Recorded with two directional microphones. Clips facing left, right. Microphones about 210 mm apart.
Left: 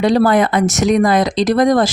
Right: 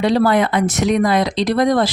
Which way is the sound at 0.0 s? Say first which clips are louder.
Left 2 dB; 45° left (ahead or behind).